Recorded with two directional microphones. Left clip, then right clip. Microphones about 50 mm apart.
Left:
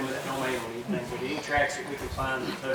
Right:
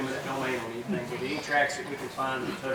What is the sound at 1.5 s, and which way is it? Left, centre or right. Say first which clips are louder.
Speech: even; centre.